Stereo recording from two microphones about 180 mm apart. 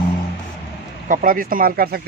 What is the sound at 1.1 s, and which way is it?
Speech, 50° right (ahead or behind).